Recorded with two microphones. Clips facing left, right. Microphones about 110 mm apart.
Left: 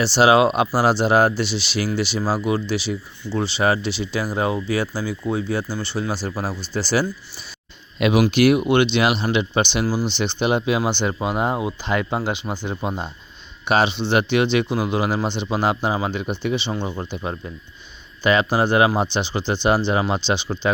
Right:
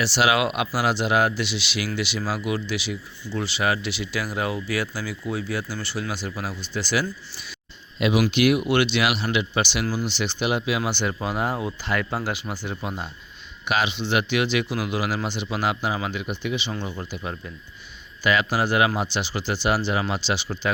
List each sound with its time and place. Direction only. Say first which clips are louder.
0.0 s speech: left 6 dB; 30° left (ahead or behind)
7.9 s speech: left 4 dB; 55° left (ahead or behind)
8.4 s speech: left 4 dB; 25° left (ahead or behind)